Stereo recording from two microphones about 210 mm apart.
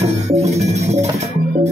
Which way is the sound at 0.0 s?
30° right (ahead or behind).